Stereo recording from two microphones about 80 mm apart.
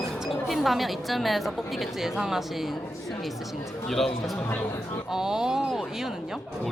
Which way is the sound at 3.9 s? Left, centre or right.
Centre.